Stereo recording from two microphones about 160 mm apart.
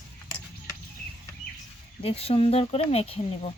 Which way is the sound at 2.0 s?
40° left (ahead or behind).